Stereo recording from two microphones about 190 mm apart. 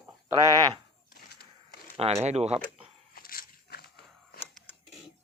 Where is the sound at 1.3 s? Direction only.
55° left (ahead or behind).